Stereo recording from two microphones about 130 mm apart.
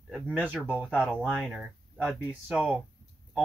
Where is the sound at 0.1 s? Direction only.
10° right (ahead or behind).